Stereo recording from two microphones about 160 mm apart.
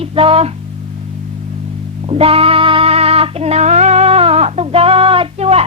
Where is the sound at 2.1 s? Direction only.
35° right (ahead or behind).